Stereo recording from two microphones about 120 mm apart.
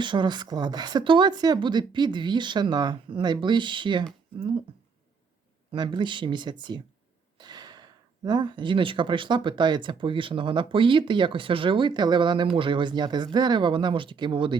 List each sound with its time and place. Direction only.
0.0 s speech: 40° right (ahead or behind)
5.7 s speech: 40° right (ahead or behind)